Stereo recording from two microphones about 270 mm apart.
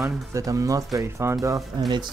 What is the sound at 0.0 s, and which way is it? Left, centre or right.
Speech, centre.